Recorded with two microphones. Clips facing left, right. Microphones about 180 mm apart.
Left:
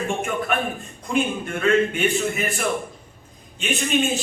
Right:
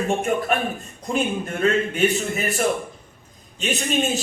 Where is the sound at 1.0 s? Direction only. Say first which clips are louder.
Even; 40° right (ahead or behind).